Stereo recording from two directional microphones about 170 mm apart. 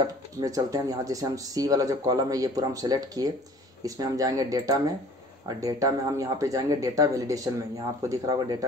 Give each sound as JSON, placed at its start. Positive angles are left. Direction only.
{"t": 0.0, "sound": "speech", "side_deg": -20}